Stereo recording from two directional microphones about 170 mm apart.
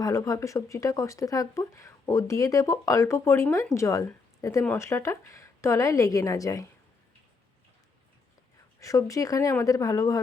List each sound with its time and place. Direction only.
0.0 s speech: 20° left (ahead or behind)
8.8 s speech: 20° left (ahead or behind)